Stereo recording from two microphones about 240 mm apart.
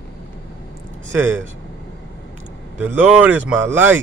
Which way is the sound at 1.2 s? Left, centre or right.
Centre.